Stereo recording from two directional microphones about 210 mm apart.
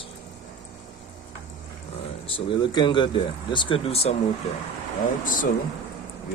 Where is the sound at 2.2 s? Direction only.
25° left (ahead or behind).